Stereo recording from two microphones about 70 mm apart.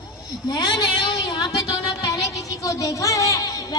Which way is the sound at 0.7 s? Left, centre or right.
Left.